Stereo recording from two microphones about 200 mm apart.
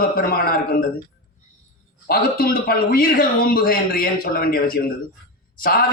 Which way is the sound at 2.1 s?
50° left (ahead or behind).